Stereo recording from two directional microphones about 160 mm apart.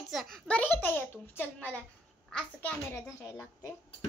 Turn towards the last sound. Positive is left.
turn(degrees=20)  # may be behind; listen again after turning